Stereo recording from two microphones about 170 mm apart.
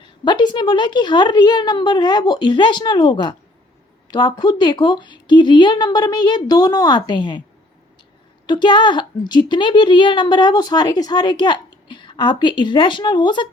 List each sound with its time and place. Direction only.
0.0 s a woman's voice: 25° left (ahead or behind)
8.4 s a woman's voice: 25° left (ahead or behind)